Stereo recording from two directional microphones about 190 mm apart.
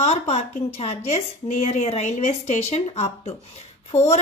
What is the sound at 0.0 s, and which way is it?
A woman's voice, 35° left (ahead or behind).